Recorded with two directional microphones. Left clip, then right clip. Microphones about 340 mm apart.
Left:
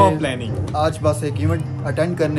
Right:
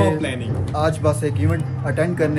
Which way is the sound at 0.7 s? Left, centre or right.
Centre.